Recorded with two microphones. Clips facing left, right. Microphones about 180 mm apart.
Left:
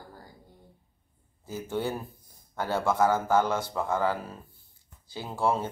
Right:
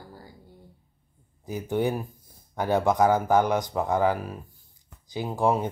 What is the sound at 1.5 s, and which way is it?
A man's voice, 15° right (ahead or behind).